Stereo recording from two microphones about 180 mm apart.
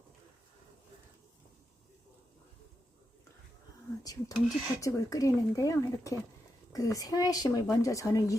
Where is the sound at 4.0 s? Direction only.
20° left (ahead or behind).